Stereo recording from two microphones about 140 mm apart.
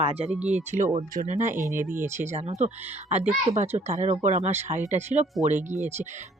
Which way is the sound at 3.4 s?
50° right (ahead or behind).